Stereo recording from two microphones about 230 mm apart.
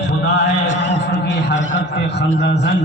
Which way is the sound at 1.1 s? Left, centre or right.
Left.